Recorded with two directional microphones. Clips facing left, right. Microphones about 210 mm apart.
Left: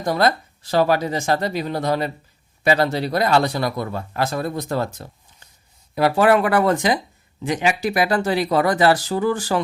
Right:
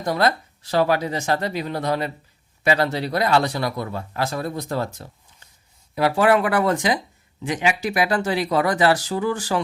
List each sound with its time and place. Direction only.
0.0 s speech: 40° left (ahead or behind)
3.8 s speech: 50° left (ahead or behind)